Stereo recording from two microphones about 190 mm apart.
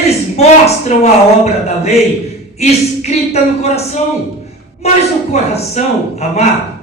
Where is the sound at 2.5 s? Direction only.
35° left (ahead or behind).